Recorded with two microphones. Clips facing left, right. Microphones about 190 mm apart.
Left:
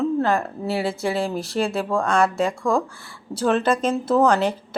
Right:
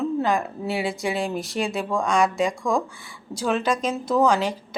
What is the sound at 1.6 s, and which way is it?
Speech, centre (ahead or behind).